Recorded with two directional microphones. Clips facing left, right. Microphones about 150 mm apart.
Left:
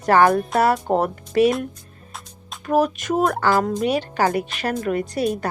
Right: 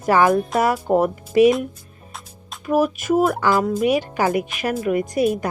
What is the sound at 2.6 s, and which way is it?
Speech, 10° right (ahead or behind).